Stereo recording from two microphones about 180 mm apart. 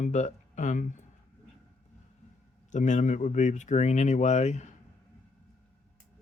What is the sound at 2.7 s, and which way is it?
Speech, 40° left (ahead or behind).